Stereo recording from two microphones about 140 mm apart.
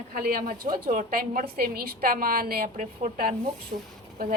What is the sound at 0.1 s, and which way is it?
A woman's voice, 85° right.